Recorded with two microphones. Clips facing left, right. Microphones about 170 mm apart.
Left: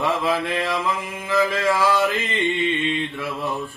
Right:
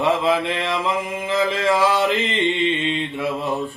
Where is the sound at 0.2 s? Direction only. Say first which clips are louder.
Right 2 dB; 20° right (ahead or behind).